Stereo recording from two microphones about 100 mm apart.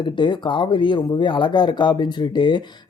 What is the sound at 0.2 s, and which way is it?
Speech, 50° left (ahead or behind).